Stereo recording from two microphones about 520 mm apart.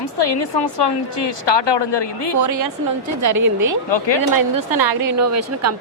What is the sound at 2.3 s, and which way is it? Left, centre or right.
A woman's voice, right.